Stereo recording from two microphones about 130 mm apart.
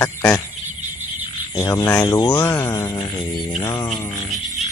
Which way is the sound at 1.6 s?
25° left (ahead or behind).